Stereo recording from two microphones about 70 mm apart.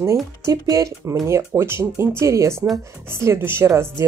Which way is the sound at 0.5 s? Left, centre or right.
Right.